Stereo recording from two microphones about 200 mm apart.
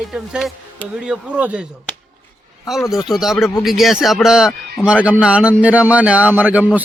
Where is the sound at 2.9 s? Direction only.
Centre (ahead or behind).